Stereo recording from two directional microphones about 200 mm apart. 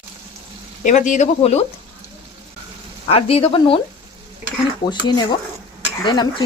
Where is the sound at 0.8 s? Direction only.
40° left (ahead or behind).